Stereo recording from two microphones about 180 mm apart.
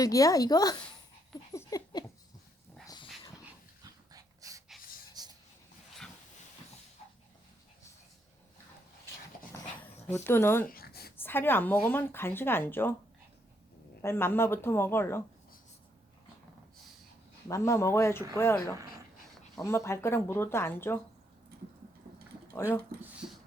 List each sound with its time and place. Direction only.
0.0 s speech: 20° left (ahead or behind)
1.5 s a sound: 20° left (ahead or behind)
2.8 s dog: 20° left (ahead or behind)
4.1 s dog: 20° right (ahead or behind)
5.2 s a sound: 20° right (ahead or behind)
9.8 s speech: 15° left (ahead or behind)
10.7 s a sound: 55° left (ahead or behind)
11.2 s a woman's voice: 10° left (ahead or behind)
14.0 s a woman's voice: 15° left (ahead or behind)
17.5 s a woman's voice: 15° left (ahead or behind)
19.6 s a woman's voice: 15° left (ahead or behind)